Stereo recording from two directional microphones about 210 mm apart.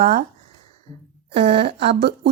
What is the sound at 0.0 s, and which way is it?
Speech, 40° right (ahead or behind).